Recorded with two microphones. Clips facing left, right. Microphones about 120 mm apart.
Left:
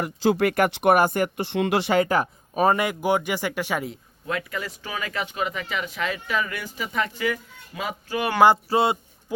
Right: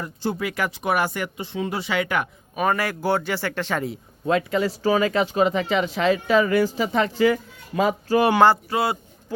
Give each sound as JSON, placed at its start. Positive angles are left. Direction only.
{"t": 0.0, "sound": "speech", "side_deg": 85}
{"t": 0.9, "sound": "speech", "side_deg": 45}
{"t": 1.4, "sound": "speech", "side_deg": 75}
{"t": 1.9, "sound": "speech", "side_deg": 35}
{"t": 2.8, "sound": "speech", "side_deg": 15}
{"t": 4.3, "sound": "speech", "side_deg": -25}
{"t": 8.7, "sound": "a man's voice", "side_deg": 25}